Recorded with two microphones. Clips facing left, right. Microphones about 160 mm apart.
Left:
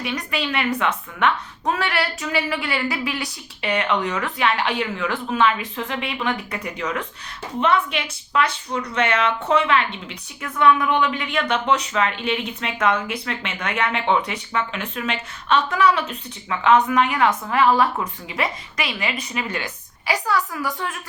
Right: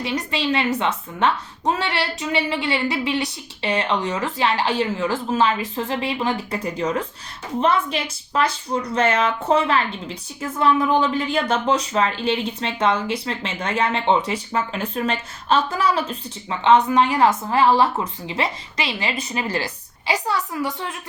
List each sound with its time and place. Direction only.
0.0 s a woman's voice: 30° right (ahead or behind)